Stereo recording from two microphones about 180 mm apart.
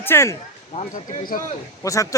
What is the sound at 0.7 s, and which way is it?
Speech, 45° left (ahead or behind).